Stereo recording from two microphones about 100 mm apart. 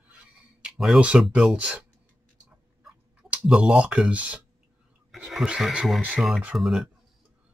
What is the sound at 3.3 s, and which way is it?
Speech, 10° right (ahead or behind).